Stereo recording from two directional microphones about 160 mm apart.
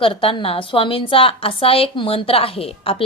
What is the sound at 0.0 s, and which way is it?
A woman's voice, 35° left (ahead or behind).